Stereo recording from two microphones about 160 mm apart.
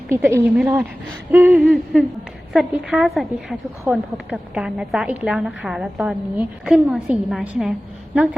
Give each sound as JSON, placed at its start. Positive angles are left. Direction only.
{"t": 0.1, "sound": "a woman's voice", "side_deg": -15}